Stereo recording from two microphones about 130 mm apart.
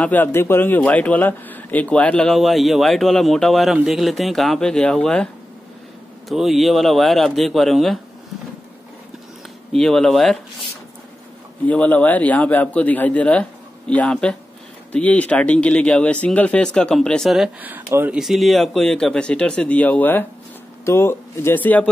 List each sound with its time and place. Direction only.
0.0 s a man's voice: 15° left (ahead or behind)
9.7 s a man's voice: 5° left (ahead or behind)
11.6 s speech: 10° left (ahead or behind)
17.6 s speech: 15° right (ahead or behind)
18.2 s speech: centre (ahead or behind)